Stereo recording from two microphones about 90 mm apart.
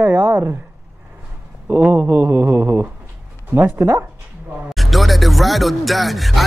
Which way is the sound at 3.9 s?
25° right (ahead or behind).